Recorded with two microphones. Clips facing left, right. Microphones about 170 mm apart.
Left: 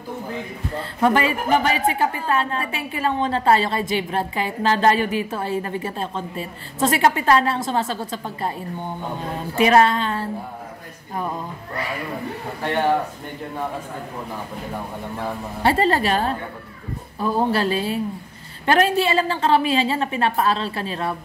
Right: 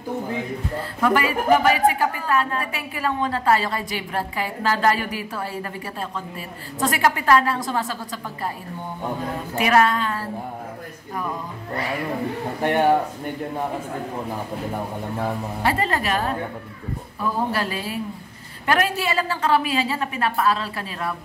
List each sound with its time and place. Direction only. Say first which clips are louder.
1.0 s a woman's voice: left 1 dB; 25° left (ahead or behind)
9.6 s a woman's voice: left 3 dB; 25° left (ahead or behind)
12.6 s a man's voice: right 2 dB; 15° right (ahead or behind)
15.6 s a woman's voice: left 5 dB; 30° left (ahead or behind)